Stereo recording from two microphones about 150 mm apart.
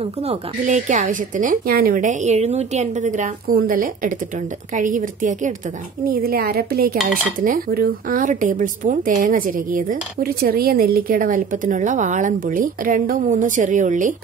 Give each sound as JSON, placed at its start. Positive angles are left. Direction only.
{"t": 0.7, "sound": "speech", "side_deg": -55}
{"t": 6.0, "sound": "speech", "side_deg": -85}
{"t": 7.3, "sound": "speech", "side_deg": -70}